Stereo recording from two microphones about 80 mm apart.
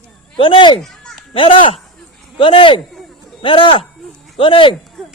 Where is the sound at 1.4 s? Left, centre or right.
Left.